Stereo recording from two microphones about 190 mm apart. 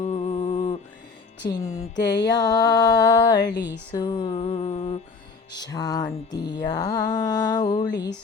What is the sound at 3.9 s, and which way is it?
Mantra, 25° left (ahead or behind).